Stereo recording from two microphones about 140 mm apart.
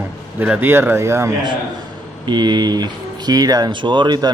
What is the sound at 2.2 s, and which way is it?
Speech, 30° right (ahead or behind).